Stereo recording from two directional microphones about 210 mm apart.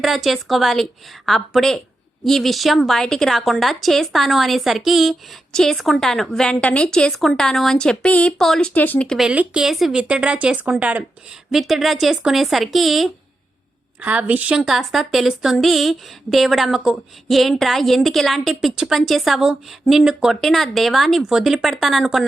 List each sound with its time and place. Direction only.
0.0 s a woman's voice: centre (ahead or behind)